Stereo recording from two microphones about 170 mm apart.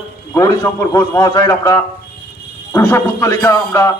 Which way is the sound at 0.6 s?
15° left (ahead or behind).